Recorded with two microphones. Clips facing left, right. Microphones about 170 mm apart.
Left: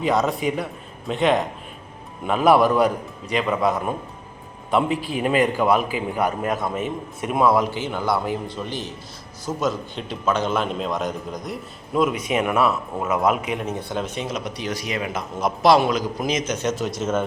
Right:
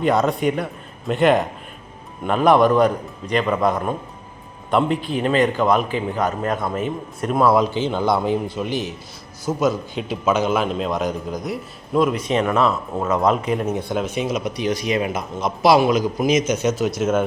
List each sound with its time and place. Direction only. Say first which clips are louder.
0.0 s a man's voice: right 3 dB; centre (ahead or behind)
7.5 s a man's voice: right 3 dB; 20° right (ahead or behind); by 13.7 s 5° left (ahead or behind)
13.7 s a man's voice: right 4 dB; 15° right (ahead or behind)
15.6 s a man's voice: right 2 dB; 5° right (ahead or behind)